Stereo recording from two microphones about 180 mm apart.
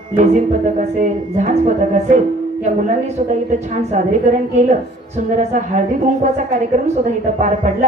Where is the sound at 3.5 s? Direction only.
40° right (ahead or behind).